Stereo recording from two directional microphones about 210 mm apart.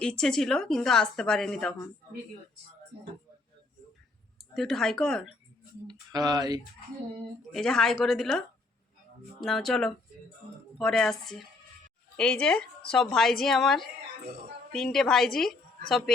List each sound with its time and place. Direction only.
0.0 s a woman's voice: 5° left (ahead or behind)
4.4 s speech: centre (ahead or behind)
5.9 s speech: 20° right (ahead or behind)
7.5 s a woman's voice: centre (ahead or behind)